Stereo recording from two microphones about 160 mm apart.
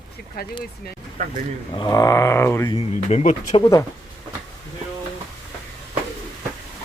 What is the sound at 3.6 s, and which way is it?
Speech, 20° left (ahead or behind).